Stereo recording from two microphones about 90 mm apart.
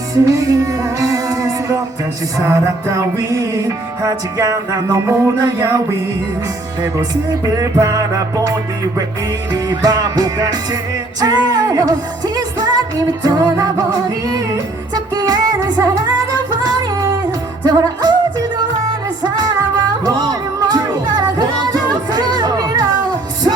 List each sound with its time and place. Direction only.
0.1 s music: 40° right (ahead or behind)
7.4 s music: 40° right (ahead or behind)
17.7 s music: 50° right (ahead or behind)